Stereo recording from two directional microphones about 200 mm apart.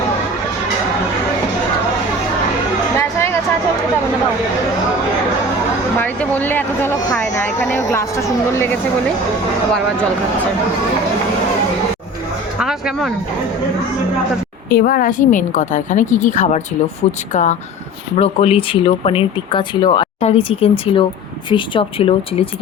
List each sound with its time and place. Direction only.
6.0 s speech: 10° left (ahead or behind)
12.5 s speech: 5° right (ahead or behind)
14.7 s a woman's voice: 50° left (ahead or behind); by 22.4 s 25° left (ahead or behind)